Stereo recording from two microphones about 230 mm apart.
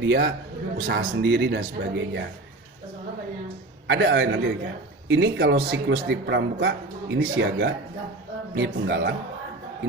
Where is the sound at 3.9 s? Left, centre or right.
Right.